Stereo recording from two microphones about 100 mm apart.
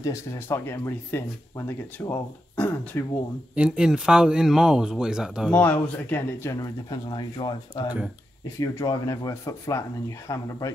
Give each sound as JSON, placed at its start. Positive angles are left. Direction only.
{"t": 0.0, "sound": "speech", "side_deg": 25}
{"t": 3.5, "sound": "speech", "side_deg": -10}
{"t": 5.5, "sound": "speech", "side_deg": 15}
{"t": 6.9, "sound": "speech", "side_deg": 50}
{"t": 8.8, "sound": "speech", "side_deg": 35}